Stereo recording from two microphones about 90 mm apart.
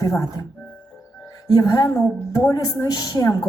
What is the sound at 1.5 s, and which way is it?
A woman's voice, 45° left (ahead or behind).